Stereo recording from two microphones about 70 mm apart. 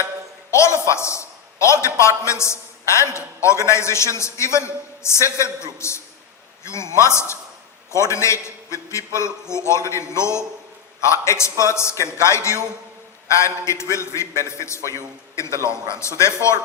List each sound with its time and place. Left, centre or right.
0.5 s a man's voice: left
6.7 s a man's voice: left